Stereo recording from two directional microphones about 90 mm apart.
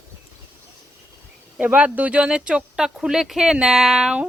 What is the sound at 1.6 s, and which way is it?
Speech, 15° right (ahead or behind).